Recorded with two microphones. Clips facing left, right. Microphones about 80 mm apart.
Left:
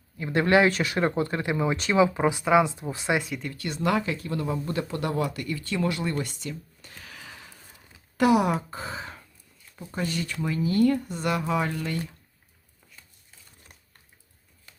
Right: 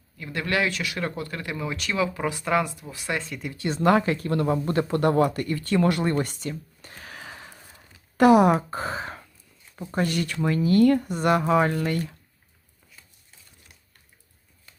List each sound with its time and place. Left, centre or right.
0.2 s speech: left
2.7 s speech: left
3.1 s speech: centre
3.5 s speech: right
3.8 s speech: right